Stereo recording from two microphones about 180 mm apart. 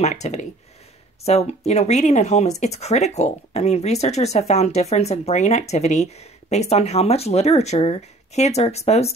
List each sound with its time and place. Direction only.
0.0 s speech: 40° left (ahead or behind)